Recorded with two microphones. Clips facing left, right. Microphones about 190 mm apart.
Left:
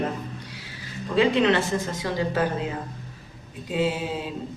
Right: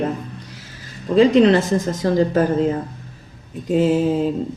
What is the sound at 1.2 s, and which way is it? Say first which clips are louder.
A woman's voice: right 7 dB; 35° right (ahead or behind).